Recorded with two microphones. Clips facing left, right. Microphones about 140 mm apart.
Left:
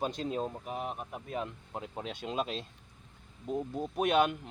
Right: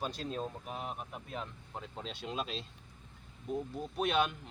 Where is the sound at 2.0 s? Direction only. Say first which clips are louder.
Left 4 dB; 50° left (ahead or behind).